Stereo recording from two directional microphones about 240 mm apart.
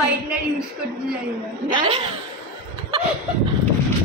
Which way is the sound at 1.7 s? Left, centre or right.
Right.